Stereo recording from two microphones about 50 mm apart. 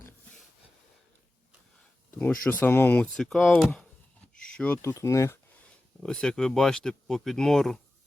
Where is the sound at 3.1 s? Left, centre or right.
Centre.